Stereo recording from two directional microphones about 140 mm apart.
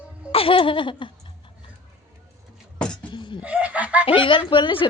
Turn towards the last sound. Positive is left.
turn(degrees=35)  # may be behind; listen again after turning